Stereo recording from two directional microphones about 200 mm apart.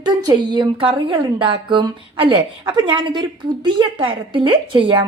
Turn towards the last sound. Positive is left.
turn(degrees=-25)  # may be behind; listen again after turning